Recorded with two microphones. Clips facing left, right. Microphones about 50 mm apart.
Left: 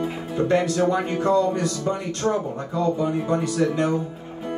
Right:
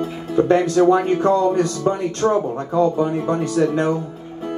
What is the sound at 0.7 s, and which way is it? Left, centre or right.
Speech, right.